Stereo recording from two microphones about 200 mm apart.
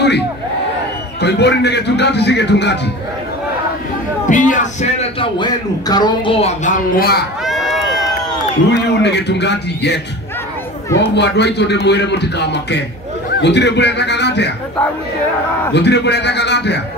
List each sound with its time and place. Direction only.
1.2 s a man's voice: 55° left (ahead or behind)
4.3 s speech: 40° left (ahead or behind); by 6.3 s 20° left (ahead or behind)
6.4 s speech: 40° left (ahead or behind)
7.4 s run: centre (ahead or behind)
8.6 s a man's voice: 60° left (ahead or behind)
11.1 s a man's voice: 60° left (ahead or behind)
15.7 s a man's voice: 60° left (ahead or behind)